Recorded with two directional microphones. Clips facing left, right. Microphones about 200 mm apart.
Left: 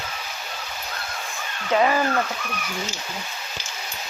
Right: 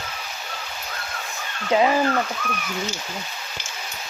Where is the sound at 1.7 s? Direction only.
15° right (ahead or behind).